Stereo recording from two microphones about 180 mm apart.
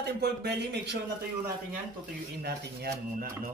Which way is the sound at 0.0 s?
65° right (ahead or behind).